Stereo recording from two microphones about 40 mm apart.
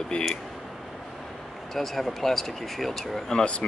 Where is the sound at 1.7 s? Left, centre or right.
Centre.